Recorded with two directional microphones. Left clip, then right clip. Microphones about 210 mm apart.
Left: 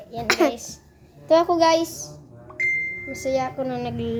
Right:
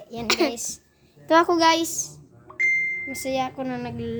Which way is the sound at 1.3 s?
45° right (ahead or behind).